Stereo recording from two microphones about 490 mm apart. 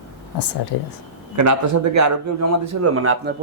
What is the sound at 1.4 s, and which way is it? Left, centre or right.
Speech, right.